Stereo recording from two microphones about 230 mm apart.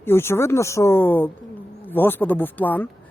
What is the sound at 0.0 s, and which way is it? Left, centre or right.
Speech, centre.